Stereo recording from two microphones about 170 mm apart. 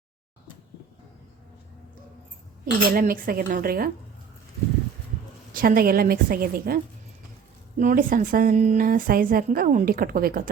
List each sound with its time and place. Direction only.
2.9 s speech: 55° right (ahead or behind)
5.5 s speech: 60° right (ahead or behind)